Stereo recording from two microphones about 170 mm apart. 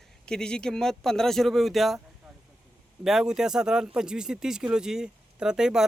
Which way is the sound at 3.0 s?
Centre (ahead or behind).